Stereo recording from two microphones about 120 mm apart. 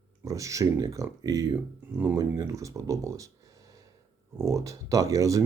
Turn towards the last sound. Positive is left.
turn(degrees=-30)  # may be behind; listen again after turning